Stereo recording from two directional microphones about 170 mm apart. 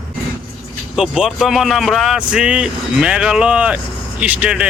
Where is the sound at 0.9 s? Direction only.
5° right (ahead or behind).